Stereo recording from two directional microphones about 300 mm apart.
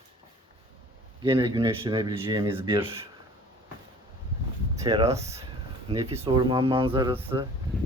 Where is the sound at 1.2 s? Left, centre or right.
Centre.